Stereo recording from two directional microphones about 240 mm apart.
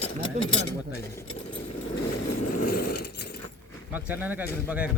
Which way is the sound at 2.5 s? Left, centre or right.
Left.